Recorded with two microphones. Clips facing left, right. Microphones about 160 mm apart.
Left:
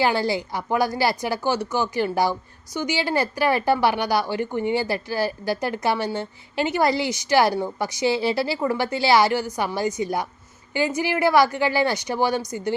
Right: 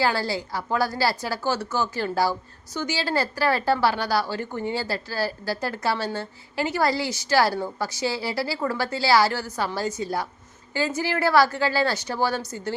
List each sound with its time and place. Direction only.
0.0 s a woman's voice: 20° left (ahead or behind)